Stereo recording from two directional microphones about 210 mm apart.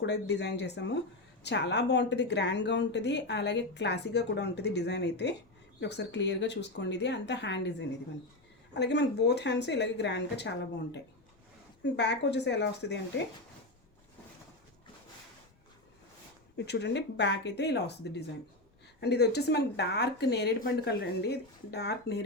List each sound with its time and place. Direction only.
0.0 s speech: 55° left (ahead or behind)
11.8 s speech: 55° left (ahead or behind)
16.6 s speech: 55° left (ahead or behind)
18.9 s speech: 50° left (ahead or behind)